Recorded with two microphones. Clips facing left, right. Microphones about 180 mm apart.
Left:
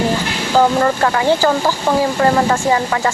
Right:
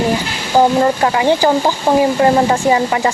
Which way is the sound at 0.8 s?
20° right (ahead or behind).